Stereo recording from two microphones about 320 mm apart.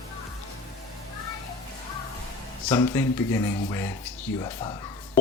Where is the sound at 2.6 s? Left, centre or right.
Centre.